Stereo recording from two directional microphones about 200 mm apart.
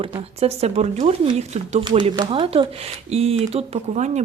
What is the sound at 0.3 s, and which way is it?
A woman's voice, 30° right (ahead or behind).